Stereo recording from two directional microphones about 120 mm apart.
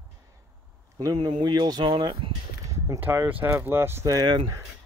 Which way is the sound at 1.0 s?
35° right (ahead or behind).